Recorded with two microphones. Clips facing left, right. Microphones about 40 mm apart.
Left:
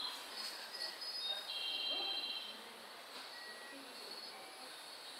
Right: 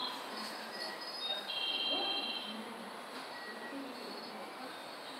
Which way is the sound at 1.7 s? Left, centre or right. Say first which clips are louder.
Right 5 dB; right.